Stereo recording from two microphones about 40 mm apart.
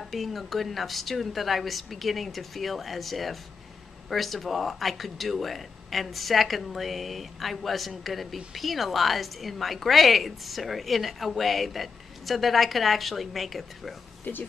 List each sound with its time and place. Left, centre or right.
0.1 s a woman's voice: centre
14.3 s speech: left